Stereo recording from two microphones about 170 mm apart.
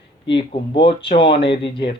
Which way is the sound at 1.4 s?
90° left.